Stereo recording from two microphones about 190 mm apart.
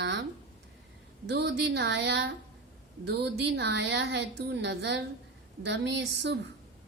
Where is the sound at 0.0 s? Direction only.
65° right (ahead or behind).